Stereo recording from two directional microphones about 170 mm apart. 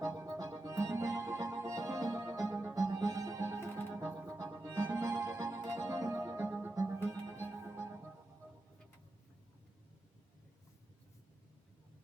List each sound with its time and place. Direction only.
0.0 s music: 15° right (ahead or behind)